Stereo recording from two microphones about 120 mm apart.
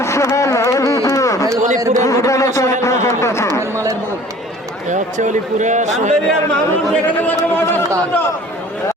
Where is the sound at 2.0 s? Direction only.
25° left (ahead or behind).